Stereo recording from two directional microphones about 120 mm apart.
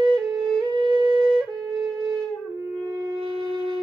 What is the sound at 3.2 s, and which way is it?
Shofar, 40° right (ahead or behind).